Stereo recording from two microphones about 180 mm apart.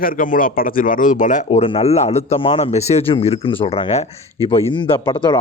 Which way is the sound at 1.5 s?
30° left (ahead or behind).